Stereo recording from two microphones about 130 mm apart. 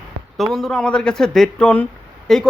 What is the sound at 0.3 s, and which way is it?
Speech, centre (ahead or behind).